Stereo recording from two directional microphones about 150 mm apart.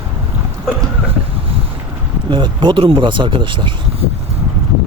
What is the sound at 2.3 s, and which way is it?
Speech, 30° right (ahead or behind).